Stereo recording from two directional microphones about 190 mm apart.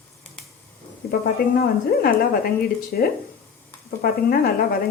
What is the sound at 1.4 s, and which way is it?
Speech, 50° left (ahead or behind).